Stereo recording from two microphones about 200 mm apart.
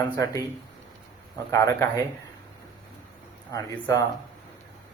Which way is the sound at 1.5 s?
15° left (ahead or behind).